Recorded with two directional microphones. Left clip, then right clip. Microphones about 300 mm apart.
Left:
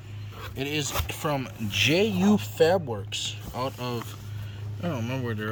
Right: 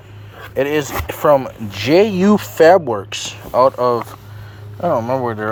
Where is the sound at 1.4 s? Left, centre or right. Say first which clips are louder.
Right 1 dB; centre.